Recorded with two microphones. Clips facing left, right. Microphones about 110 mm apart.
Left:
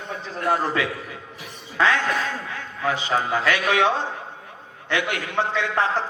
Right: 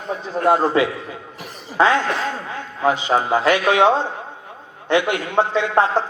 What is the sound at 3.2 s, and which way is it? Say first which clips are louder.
A man's voice: right 5 dB; 25° right (ahead or behind).